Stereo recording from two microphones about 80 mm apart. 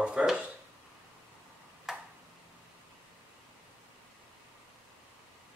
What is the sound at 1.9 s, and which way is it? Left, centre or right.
Tick-tock, centre.